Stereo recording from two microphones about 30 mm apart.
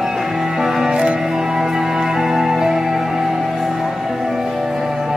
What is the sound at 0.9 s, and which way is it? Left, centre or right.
Music, right.